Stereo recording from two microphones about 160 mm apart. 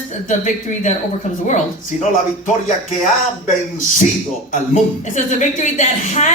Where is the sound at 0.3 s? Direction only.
50° left (ahead or behind).